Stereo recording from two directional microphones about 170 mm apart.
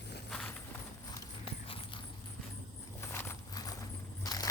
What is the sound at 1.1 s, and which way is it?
Clip-clop, 30° left (ahead or behind).